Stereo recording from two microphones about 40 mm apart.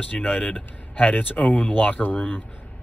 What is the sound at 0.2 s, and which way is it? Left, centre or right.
Speech, left.